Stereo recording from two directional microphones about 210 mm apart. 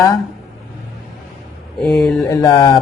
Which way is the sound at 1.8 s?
Centre (ahead or behind).